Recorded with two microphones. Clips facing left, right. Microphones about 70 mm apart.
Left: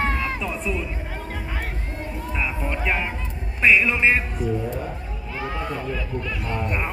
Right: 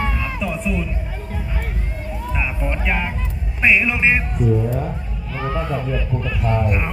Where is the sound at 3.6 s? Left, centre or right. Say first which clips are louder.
Right 1 dB; centre.